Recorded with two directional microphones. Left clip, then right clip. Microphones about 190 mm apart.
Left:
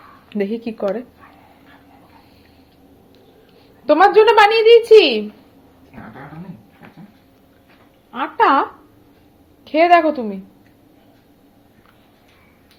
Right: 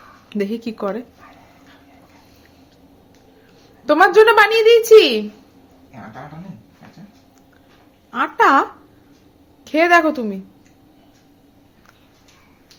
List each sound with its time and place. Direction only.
0.3 s a woman's voice: 15° right (ahead or behind)
3.8 s a woman's voice: 15° right (ahead or behind)
8.1 s a woman's voice: 30° right (ahead or behind)
9.6 s a woman's voice: 25° right (ahead or behind)